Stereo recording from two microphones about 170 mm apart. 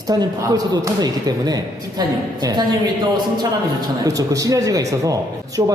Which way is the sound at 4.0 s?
20° right (ahead or behind).